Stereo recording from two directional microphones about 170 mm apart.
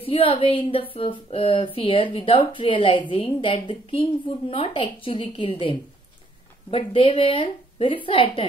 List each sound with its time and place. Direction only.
0.0 s speech: 30° left (ahead or behind)